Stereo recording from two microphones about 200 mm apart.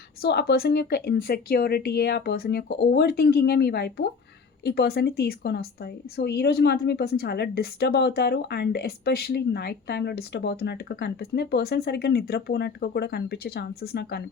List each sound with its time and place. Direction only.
0.2 s a woman's voice: 50° left (ahead or behind)